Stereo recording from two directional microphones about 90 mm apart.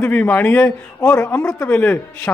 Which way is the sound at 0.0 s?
20° left (ahead or behind).